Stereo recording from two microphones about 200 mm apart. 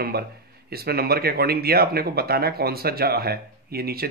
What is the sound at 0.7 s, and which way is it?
Speech, 50° right (ahead or behind).